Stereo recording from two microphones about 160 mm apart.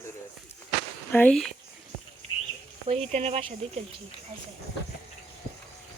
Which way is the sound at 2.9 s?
40° right (ahead or behind).